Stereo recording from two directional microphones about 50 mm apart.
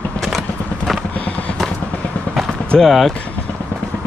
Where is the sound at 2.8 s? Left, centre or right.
Centre.